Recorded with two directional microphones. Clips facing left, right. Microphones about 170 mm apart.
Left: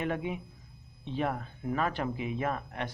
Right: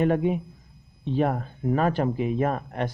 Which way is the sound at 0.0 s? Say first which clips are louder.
Right 10 dB; 45° right (ahead or behind).